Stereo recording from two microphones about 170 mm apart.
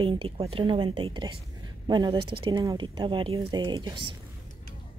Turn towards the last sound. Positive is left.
turn(degrees=-25)  # may be behind; listen again after turning